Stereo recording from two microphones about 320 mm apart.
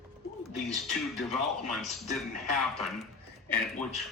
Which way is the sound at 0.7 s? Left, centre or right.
Centre.